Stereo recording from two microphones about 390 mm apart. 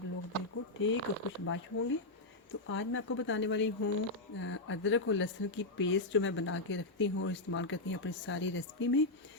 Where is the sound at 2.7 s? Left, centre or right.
Left.